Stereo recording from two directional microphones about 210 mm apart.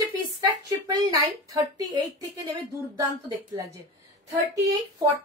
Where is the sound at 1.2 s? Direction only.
15° right (ahead or behind).